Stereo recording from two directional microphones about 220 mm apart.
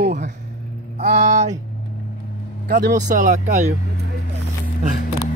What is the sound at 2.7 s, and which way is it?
Speech, 35° right (ahead or behind).